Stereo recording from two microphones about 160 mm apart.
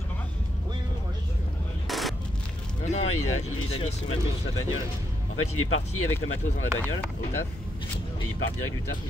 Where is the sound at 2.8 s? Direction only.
45° left (ahead or behind).